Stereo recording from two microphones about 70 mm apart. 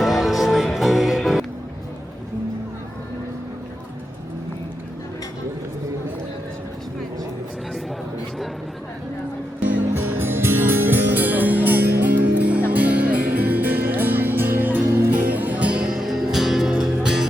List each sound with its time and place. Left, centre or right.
0.0 s music: centre
9.6 s music: right
14.8 s music: right
15.1 s music: right
15.9 s music: centre